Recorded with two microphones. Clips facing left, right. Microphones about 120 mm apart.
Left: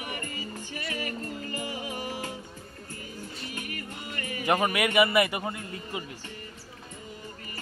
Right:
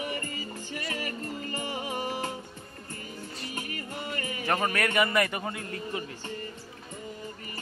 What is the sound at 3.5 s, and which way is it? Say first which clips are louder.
Music: right 2 dB; 30° right (ahead or behind).